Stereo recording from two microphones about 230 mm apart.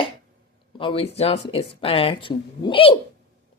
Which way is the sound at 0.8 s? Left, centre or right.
Left.